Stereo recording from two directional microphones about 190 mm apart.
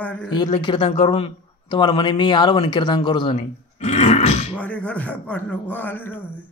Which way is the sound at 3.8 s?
40° left (ahead or behind).